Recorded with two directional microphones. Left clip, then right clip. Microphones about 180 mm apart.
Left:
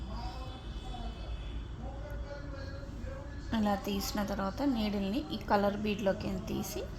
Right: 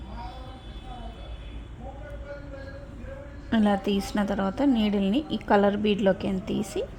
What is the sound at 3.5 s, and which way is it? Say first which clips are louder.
A woman's voice: right 8 dB; 60° right (ahead or behind).